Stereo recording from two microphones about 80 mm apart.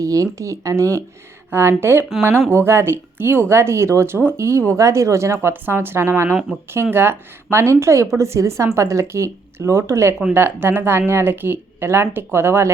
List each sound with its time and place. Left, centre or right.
0.0 s speech: right
1.5 s speech: right